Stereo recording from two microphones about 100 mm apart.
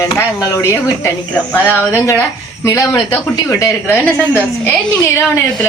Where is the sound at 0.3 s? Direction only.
30° left (ahead or behind).